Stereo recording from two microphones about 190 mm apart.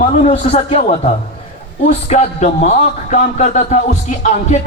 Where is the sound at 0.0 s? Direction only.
35° left (ahead or behind).